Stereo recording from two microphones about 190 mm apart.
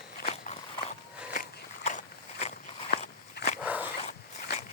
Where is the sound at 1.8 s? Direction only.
35° left (ahead or behind).